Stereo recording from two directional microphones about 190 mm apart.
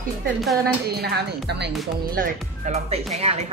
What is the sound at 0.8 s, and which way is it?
Speech, 55° right (ahead or behind).